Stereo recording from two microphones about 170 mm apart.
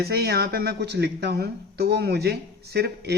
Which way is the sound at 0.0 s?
70° right (ahead or behind).